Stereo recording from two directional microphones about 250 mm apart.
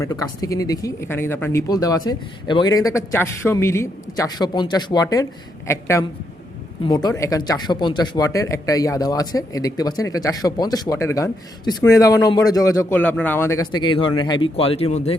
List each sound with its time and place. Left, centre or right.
0.0 s a man's voice: centre